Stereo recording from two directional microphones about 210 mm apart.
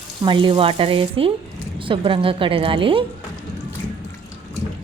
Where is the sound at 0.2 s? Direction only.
20° right (ahead or behind).